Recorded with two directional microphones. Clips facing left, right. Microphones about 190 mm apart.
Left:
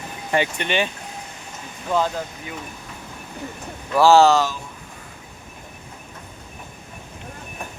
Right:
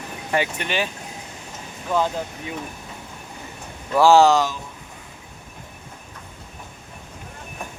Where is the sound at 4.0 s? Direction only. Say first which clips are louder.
Even; 15° right (ahead or behind).